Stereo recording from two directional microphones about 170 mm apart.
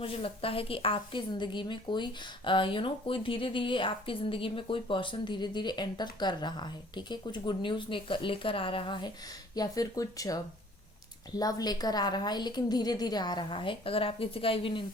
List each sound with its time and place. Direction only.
0.0 s speech: 35° left (ahead or behind)